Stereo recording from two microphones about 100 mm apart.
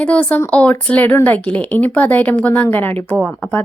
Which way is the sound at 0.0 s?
15° left (ahead or behind).